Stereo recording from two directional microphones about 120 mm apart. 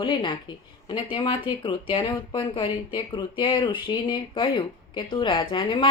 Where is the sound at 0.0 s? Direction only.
45° left (ahead or behind).